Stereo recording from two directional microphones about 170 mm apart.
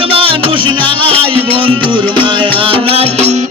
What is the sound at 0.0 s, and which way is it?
Music, 30° right (ahead or behind).